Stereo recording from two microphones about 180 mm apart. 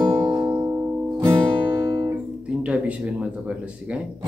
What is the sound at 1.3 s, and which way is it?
Guitar, 15° right (ahead or behind).